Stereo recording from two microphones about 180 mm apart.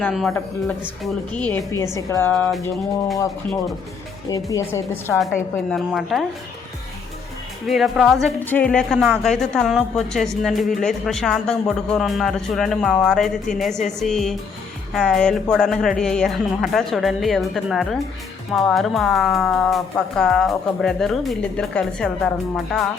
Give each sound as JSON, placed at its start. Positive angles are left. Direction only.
{"t": 0.0, "sound": "speech", "side_deg": 0}
{"t": 2.3, "sound": "speech", "side_deg": 0}
{"t": 4.3, "sound": "speech", "side_deg": 20}
{"t": 5.2, "sound": "speech", "side_deg": 0}
{"t": 7.7, "sound": "speech", "side_deg": 0}